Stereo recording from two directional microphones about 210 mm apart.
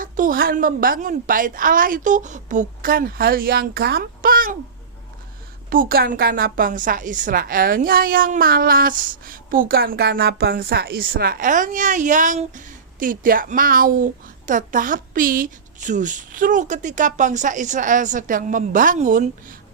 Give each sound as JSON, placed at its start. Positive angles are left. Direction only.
{"t": 0.0, "sound": "a woman's voice", "side_deg": -40}
{"t": 5.7, "sound": "a woman's voice", "side_deg": -45}